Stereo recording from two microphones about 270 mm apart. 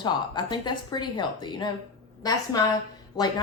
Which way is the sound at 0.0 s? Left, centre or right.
Centre.